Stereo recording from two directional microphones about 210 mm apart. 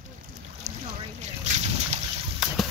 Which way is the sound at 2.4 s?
Centre (ahead or behind).